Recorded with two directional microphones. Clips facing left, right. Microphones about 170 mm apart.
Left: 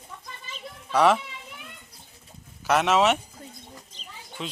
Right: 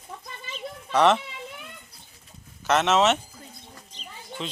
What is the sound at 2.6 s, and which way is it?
Speech, 10° left (ahead or behind).